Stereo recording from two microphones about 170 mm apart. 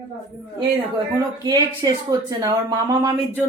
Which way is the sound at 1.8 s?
25° right (ahead or behind).